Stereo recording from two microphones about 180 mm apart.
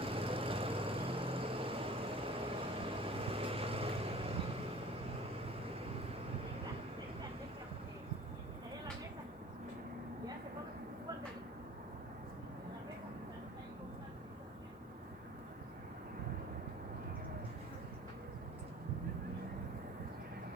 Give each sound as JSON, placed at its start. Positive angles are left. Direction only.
{"t": 0.0, "sound": "vehicle", "side_deg": -30}